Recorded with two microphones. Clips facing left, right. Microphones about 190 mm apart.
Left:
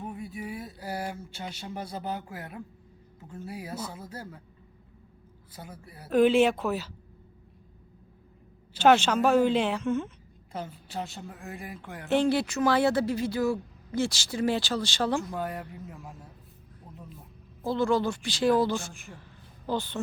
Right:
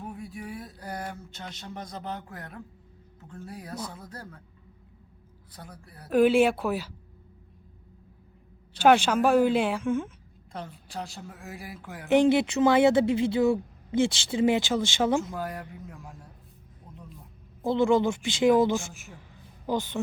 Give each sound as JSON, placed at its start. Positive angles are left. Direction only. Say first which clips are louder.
{"t": 0.0, "sound": "a sound", "louder": "left 1 dB", "side_deg": 0}
{"t": 3.2, "sound": "a woman's voice", "louder": "left 2 dB", "side_deg": 10}
{"t": 5.5, "sound": "a woman's voice", "louder": "left 2 dB", "side_deg": 5}
{"t": 6.1, "sound": "speech", "louder": "right 1 dB", "side_deg": -10}
{"t": 8.8, "sound": "speech", "louder": "right 1 dB", "side_deg": -10}
{"t": 10.5, "sound": "a woman's voice", "louder": "left 2 dB", "side_deg": 5}
{"t": 12.0, "sound": "speech", "louder": "right 4 dB", "side_deg": -15}
{"t": 15.4, "sound": "a woman's voice", "louder": "left 1 dB", "side_deg": 0}
{"t": 17.6, "sound": "speech", "louder": "right 3 dB", "side_deg": -20}